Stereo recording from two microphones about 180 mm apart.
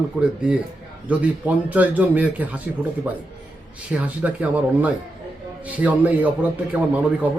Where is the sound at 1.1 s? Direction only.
5° right (ahead or behind).